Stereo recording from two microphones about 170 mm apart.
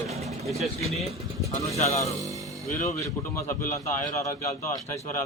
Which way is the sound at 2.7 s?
15° left (ahead or behind).